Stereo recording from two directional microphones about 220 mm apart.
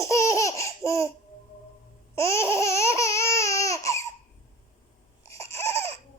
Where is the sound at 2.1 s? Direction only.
10° left (ahead or behind).